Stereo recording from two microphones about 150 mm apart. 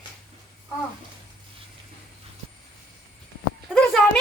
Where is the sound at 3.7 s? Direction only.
Centre (ahead or behind).